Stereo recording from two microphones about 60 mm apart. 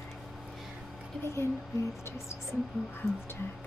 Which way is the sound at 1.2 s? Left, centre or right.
Left.